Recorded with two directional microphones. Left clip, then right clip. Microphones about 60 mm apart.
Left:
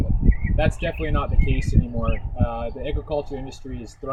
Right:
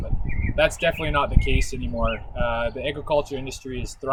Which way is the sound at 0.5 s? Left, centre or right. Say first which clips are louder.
Right 5 dB; right.